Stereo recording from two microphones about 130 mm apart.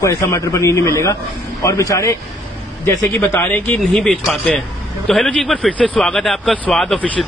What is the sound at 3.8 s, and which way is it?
Speech, 5° left (ahead or behind).